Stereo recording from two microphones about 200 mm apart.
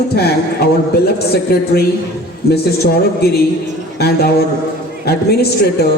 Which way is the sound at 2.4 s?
55° left (ahead or behind).